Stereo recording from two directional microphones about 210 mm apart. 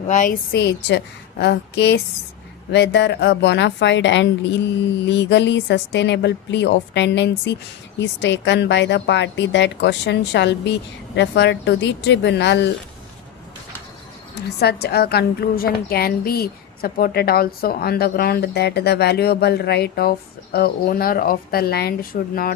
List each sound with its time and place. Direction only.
0.1 s a woman's voice: 40° left (ahead or behind)
14.3 s a woman's voice: 50° left (ahead or behind)